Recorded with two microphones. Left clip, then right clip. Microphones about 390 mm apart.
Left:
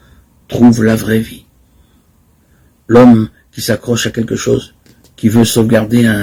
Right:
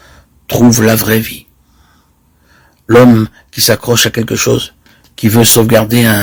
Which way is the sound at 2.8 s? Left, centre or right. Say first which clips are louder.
Right 1 dB; right.